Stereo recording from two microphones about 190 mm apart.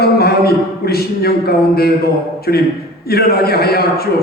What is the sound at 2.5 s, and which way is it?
A man's voice, 55° left (ahead or behind).